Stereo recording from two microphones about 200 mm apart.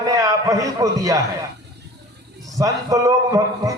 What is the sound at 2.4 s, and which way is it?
A man's voice, 15° right (ahead or behind).